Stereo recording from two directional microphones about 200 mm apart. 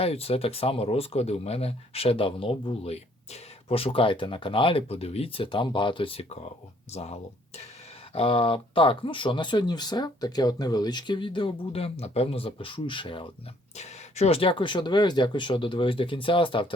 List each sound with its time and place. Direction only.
0.0 s speech: 30° left (ahead or behind)